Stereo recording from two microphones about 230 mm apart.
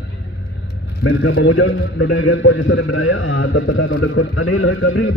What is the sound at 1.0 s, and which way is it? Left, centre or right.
A man's voice, left.